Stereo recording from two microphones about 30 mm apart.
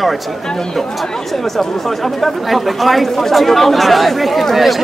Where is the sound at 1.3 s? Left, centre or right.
Centre.